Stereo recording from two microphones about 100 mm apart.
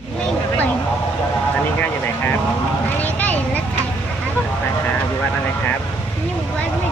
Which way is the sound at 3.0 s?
15° left (ahead or behind).